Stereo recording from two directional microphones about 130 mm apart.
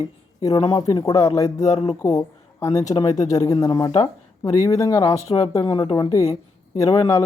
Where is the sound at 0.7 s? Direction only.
35° left (ahead or behind).